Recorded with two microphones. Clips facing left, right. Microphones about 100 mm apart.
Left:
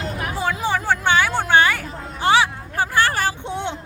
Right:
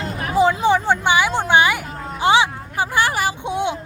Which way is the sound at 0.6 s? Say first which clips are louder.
Right 4 dB; 20° right (ahead or behind).